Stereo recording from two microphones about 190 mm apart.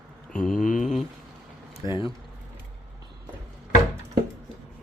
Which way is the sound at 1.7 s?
25° left (ahead or behind).